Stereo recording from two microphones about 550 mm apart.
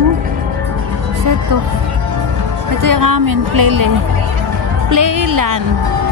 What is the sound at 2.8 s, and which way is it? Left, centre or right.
A woman's voice, right.